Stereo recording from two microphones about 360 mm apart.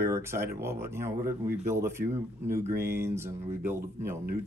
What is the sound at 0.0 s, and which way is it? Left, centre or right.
Speech, centre.